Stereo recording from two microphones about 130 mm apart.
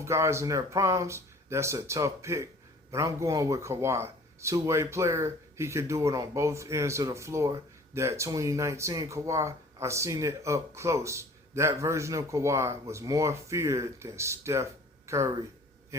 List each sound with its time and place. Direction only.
0.0 s speech: 20° right (ahead or behind)